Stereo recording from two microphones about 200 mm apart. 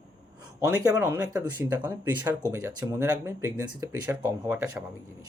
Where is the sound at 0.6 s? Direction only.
15° right (ahead or behind).